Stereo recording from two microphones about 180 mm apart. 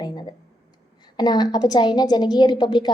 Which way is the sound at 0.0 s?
25° left (ahead or behind).